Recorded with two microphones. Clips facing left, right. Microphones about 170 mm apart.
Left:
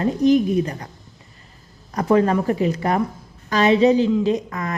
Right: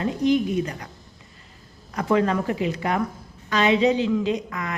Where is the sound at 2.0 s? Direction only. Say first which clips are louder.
Left 4 dB; 35° left (ahead or behind).